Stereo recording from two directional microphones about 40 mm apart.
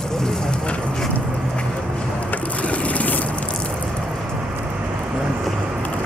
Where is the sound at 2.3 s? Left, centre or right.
Left.